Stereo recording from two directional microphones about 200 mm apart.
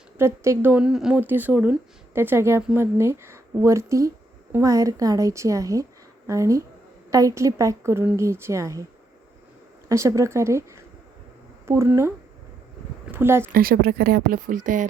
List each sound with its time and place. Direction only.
0.2 s speech: 15° right (ahead or behind)
9.9 s speech: 15° right (ahead or behind)
11.6 s speech: 15° right (ahead or behind)
13.5 s speech: 45° right (ahead or behind)